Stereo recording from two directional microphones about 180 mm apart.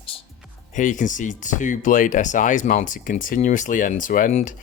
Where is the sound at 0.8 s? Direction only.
45° left (ahead or behind).